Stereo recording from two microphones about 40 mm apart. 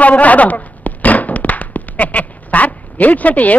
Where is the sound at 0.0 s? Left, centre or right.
Left.